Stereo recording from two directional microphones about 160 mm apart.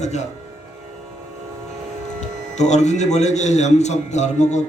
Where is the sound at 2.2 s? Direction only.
45° left (ahead or behind).